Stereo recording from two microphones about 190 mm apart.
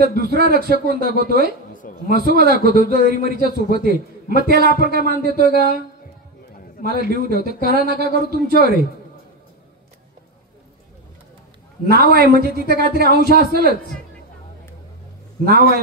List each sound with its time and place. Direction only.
0.0 s speech: 55° right (ahead or behind)
1.7 s a sound: 45° left (ahead or behind)
2.0 s a man's voice: 55° right (ahead or behind)
6.8 s a man's voice: 55° right (ahead or behind)
11.9 s speech: 55° right (ahead or behind)